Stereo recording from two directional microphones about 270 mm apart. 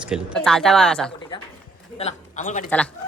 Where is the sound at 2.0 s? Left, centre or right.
Left.